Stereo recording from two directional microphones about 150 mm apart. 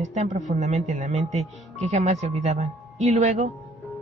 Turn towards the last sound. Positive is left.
turn(degrees=-50)  # may be behind; listen again after turning